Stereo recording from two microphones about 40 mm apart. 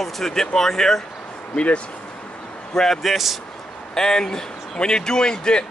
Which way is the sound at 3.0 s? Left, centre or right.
Centre.